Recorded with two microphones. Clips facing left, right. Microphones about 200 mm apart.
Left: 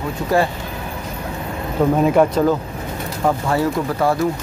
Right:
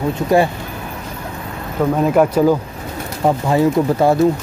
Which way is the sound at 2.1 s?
10° right (ahead or behind).